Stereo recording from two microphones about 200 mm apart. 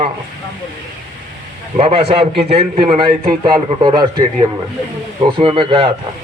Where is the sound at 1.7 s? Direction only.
30° right (ahead or behind).